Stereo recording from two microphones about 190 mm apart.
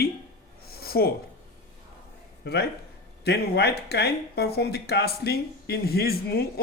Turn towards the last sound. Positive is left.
turn(degrees=55)  # may be behind; listen again after turning